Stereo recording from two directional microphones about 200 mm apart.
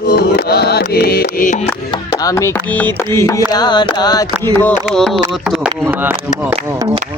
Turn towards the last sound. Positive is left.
turn(degrees=-5)  # may be behind; listen again after turning